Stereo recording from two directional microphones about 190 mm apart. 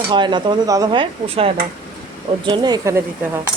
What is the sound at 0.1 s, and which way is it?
Speech, 25° right (ahead or behind).